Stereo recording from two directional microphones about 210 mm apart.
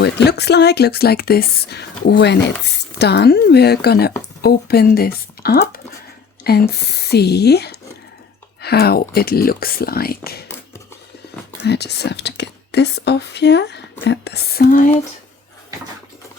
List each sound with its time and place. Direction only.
0.0 s speech: 50° left (ahead or behind)
11.6 s speech: 50° left (ahead or behind)